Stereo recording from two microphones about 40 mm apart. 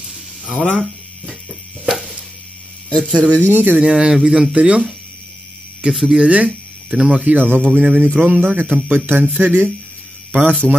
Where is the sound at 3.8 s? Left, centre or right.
Centre.